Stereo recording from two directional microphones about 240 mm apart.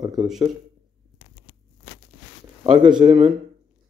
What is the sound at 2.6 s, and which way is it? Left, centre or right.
Speech, centre.